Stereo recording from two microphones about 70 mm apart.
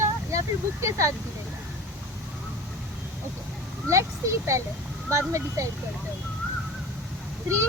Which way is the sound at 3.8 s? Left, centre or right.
Right.